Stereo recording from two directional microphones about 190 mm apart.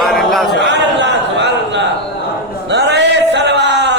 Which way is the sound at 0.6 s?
65° right (ahead or behind).